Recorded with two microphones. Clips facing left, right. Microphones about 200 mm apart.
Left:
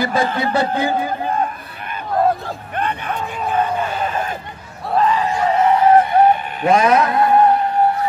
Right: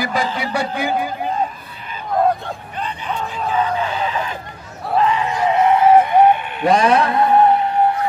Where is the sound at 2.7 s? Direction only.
60° left (ahead or behind).